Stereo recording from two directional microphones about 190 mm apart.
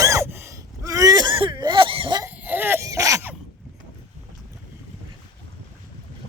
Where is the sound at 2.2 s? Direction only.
10° right (ahead or behind).